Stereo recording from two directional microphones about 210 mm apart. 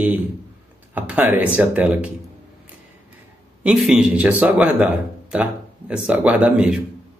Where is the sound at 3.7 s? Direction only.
5° right (ahead or behind).